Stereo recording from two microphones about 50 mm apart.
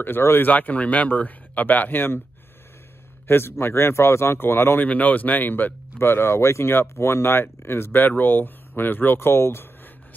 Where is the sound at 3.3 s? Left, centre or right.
Left.